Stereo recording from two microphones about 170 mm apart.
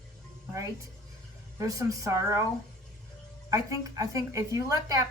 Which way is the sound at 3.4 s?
20° right (ahead or behind).